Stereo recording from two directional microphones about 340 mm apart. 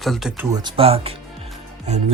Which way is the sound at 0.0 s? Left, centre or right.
Centre.